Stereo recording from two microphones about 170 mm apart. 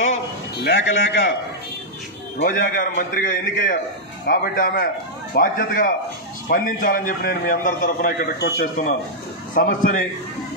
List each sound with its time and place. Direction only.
0.7 s a man's voice: 90° left
2.4 s a man's voice: 55° left (ahead or behind)
9.5 s a man's voice: 55° left (ahead or behind)